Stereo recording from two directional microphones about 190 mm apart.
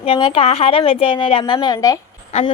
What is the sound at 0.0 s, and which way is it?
A woman's voice, 30° left (ahead or behind).